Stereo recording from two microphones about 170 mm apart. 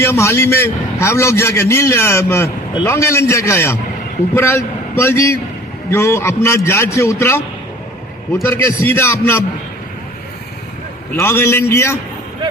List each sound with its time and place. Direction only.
0.0 s a man's voice: 15° left (ahead or behind)
8.4 s a man's voice: 15° left (ahead or behind)
11.1 s a man's voice: 15° left (ahead or behind)